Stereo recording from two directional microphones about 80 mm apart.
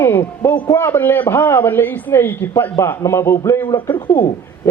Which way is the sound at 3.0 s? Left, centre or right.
Left.